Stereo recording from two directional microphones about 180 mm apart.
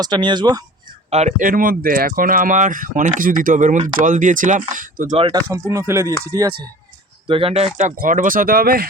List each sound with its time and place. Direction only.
0.0 s speech: 25° right (ahead or behind)
1.1 s speech: 40° right (ahead or behind)
5.1 s speech: 30° right (ahead or behind)
5.5 s speech: 15° right (ahead or behind)
7.3 s speech: 30° right (ahead or behind)
7.8 s speech: 45° right (ahead or behind)